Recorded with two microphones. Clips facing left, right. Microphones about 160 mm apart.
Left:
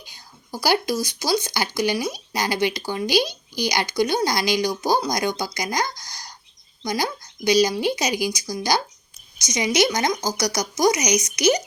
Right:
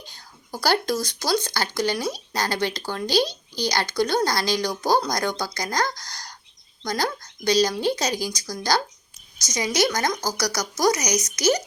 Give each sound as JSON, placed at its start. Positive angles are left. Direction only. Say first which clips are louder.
{"t": 0.0, "sound": "speech", "louder": "right 1 dB", "side_deg": 10}
{"t": 6.0, "sound": "a sound", "louder": "right 1 dB", "side_deg": 10}
{"t": 6.8, "sound": "speech", "louder": "left 1 dB", "side_deg": 10}